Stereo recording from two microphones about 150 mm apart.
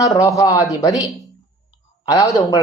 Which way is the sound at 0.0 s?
20° left (ahead or behind).